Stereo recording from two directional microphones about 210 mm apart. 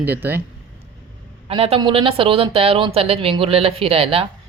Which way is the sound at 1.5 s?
25° right (ahead or behind).